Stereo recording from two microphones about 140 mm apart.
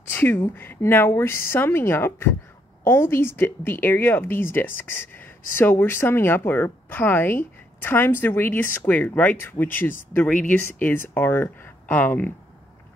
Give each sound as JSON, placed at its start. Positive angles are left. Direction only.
{"t": 0.1, "sound": "speech", "side_deg": 15}